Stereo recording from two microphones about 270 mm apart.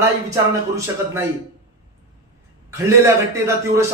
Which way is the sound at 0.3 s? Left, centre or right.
Centre.